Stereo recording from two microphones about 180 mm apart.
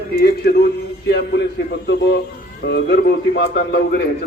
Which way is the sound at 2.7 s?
70° left (ahead or behind).